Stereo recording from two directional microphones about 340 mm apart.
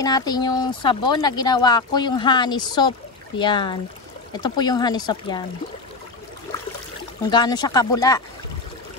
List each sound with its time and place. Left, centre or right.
0.0 s speech: centre
7.2 s speech: centre